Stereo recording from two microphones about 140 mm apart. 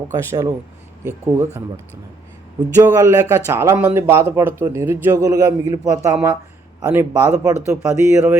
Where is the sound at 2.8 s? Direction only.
20° right (ahead or behind).